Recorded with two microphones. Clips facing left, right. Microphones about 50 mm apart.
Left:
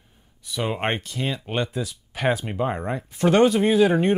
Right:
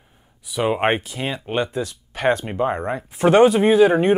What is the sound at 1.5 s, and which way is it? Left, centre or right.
Speech, centre.